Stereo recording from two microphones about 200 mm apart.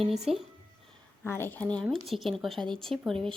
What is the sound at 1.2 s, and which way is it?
A woman's voice, 10° left (ahead or behind).